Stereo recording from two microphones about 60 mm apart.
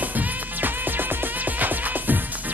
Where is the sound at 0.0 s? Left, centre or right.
Right.